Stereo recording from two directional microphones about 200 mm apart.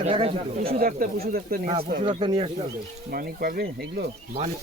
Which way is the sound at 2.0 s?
25° right (ahead or behind).